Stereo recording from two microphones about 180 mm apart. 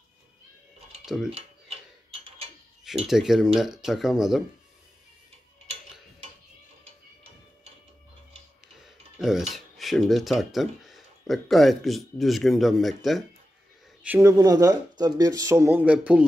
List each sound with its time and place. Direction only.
1.0 s mechanisms: centre (ahead or behind)
3.1 s speech: centre (ahead or behind)
9.2 s speech: centre (ahead or behind)
14.0 s speech: 10° right (ahead or behind)